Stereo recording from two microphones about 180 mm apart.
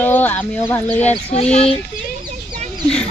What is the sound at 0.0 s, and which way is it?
Speech, 10° left (ahead or behind).